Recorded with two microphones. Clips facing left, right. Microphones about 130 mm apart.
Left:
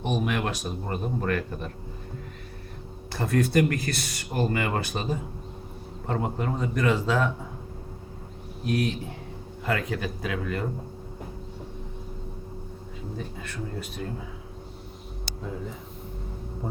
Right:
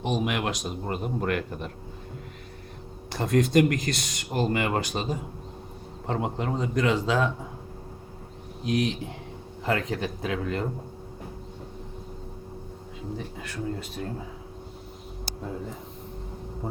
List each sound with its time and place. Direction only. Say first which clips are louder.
0.2 s speech: even; 15° right (ahead or behind)
3.1 s speech: right 2 dB; 15° right (ahead or behind)
8.6 s speech: right 1 dB; 20° right (ahead or behind)
13.1 s speech: left 1 dB; 20° right (ahead or behind)